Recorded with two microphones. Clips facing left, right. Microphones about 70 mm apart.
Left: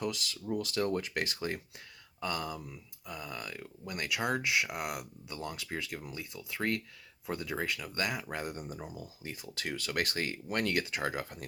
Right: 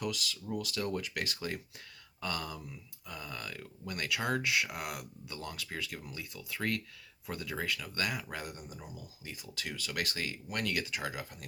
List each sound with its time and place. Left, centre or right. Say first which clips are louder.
0.0 s speech: left 1 dB; left
2.2 s speech: left 2 dB; centre; by 11.4 s left